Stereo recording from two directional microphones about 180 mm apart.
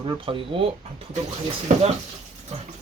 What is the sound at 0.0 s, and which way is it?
Speech, 30° right (ahead or behind).